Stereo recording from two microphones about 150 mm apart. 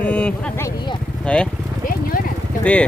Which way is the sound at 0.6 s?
20° left (ahead or behind).